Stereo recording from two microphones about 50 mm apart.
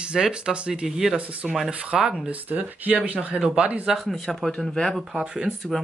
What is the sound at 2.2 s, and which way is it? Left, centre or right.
Speech, right.